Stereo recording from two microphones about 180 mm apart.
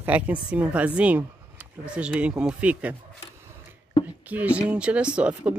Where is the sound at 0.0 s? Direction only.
10° right (ahead or behind).